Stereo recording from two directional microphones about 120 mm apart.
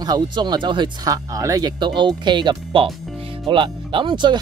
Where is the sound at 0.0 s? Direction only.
35° right (ahead or behind).